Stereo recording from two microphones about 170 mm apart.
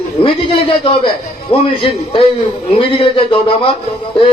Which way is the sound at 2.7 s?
30° left (ahead or behind).